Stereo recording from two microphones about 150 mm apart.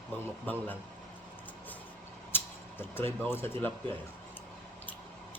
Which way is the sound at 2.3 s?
15° left (ahead or behind).